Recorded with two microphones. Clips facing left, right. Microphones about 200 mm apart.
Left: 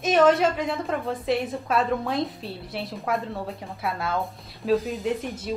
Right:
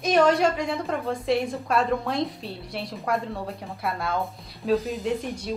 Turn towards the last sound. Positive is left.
turn(degrees=0)  # may be behind; listen again after turning